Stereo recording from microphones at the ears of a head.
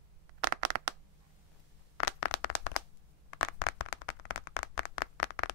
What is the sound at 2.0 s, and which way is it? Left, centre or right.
Clapping, left.